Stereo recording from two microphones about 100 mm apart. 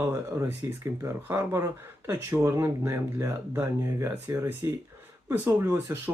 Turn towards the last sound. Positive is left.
turn(degrees=-25)  # may be behind; listen again after turning